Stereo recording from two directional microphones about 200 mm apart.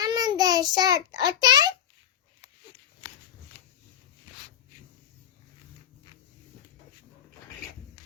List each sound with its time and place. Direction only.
0.0 s child singing: 20° right (ahead or behind)
1.2 s a child's voice: 20° right (ahead or behind)